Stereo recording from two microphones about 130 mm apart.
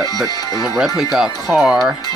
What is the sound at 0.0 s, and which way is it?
Speech, 30° left (ahead or behind).